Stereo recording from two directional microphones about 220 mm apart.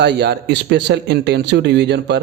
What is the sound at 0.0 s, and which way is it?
Speech, 50° right (ahead or behind).